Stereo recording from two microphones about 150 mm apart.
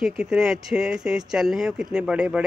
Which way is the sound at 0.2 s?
5° right (ahead or behind).